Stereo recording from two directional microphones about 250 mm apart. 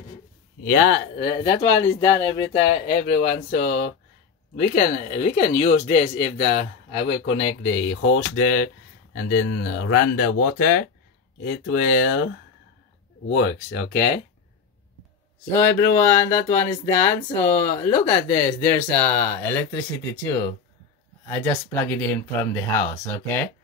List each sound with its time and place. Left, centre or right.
0.7 s speech: left
1.4 s speech: centre
2.9 s speech: left
7.4 s speech: left
13.4 s speech: left
15.5 s speech: centre